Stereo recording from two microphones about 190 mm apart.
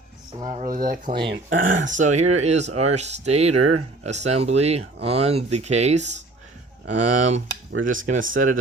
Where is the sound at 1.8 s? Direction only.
40° right (ahead or behind).